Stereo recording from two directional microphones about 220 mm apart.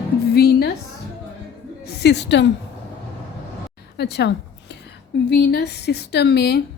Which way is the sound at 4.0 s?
50° left (ahead or behind).